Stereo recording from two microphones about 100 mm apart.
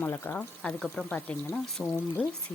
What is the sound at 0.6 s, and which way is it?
Speech, 10° left (ahead or behind).